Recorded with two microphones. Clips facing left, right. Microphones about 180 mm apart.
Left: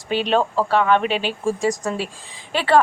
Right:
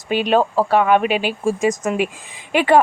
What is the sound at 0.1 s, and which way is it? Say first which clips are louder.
A woman's voice: right 3 dB; 10° right (ahead or behind).